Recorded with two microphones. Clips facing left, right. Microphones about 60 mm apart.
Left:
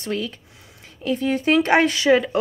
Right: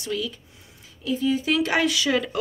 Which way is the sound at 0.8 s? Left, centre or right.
Left.